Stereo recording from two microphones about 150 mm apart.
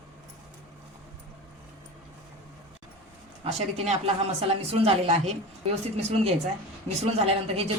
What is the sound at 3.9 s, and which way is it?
A woman's voice, 45° right (ahead or behind).